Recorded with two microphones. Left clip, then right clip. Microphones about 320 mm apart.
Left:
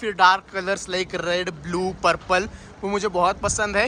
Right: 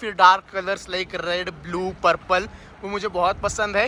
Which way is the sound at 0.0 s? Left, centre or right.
Centre.